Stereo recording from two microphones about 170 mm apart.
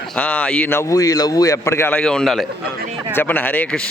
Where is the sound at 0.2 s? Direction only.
10° left (ahead or behind).